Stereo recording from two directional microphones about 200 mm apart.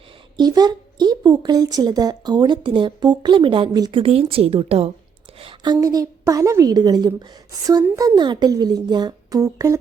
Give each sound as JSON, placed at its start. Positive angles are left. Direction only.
{"t": 0.3, "sound": "a woman's voice", "side_deg": -20}